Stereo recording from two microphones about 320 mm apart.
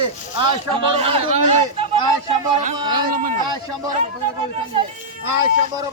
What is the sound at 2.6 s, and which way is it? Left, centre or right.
Speech, right.